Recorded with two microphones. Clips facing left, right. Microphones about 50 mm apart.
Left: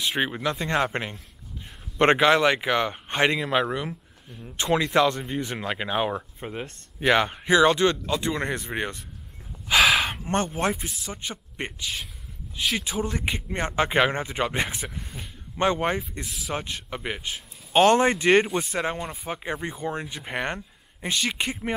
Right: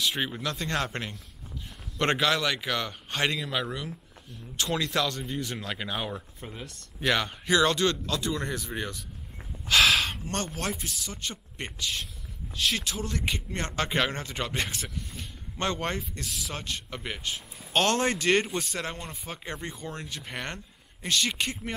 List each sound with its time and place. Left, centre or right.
0.0 s speech: left
8.2 s speech: left
9.7 s gasp: centre
11.1 s a man's voice: left; by 16.5 s centre
16.7 s a man's voice: centre